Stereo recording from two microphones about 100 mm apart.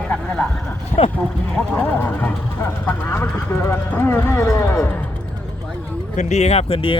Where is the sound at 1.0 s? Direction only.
80° left.